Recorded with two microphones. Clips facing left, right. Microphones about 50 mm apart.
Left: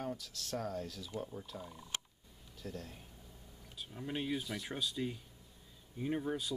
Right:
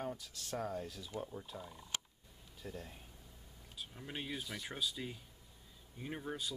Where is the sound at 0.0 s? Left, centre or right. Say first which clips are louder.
Left 1 dB; centre.